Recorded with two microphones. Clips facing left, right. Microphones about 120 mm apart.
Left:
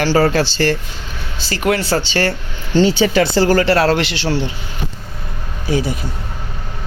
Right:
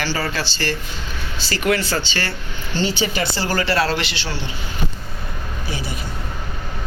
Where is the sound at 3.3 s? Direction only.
55° left (ahead or behind).